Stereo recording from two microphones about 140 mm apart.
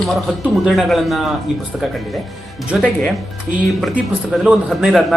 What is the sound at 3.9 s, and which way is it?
Speech, 5° right (ahead or behind).